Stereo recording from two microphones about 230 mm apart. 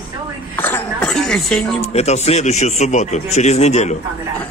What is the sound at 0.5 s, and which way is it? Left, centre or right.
Speech, centre.